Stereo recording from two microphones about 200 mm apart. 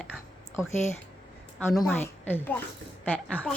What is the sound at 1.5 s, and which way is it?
A woman's voice, 5° left (ahead or behind).